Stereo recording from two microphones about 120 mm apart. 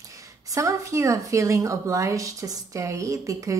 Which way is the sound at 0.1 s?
25° right (ahead or behind).